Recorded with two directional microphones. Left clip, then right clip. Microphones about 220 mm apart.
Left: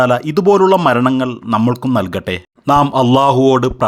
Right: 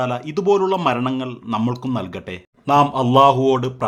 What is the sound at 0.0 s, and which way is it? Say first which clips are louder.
Speech: left 9 dB; 30° left (ahead or behind).